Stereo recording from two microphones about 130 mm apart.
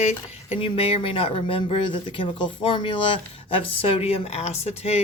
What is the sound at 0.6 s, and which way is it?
Speech, 50° left (ahead or behind).